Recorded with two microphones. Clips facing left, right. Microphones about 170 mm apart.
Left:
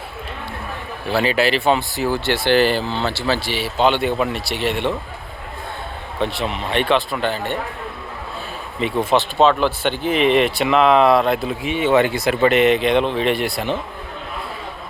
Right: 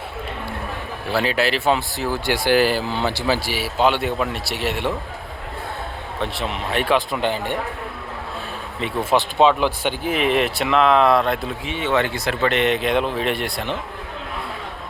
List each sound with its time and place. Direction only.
1.1 s speech: centre (ahead or behind)
2.2 s speech: 10° right (ahead or behind)
6.1 s speech: centre (ahead or behind)
7.1 s speech: 15° right (ahead or behind)
8.8 s speech: 10° right (ahead or behind)
11.6 s speech: 15° left (ahead or behind)